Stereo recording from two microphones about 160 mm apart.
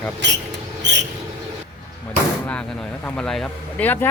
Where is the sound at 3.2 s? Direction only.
5° left (ahead or behind).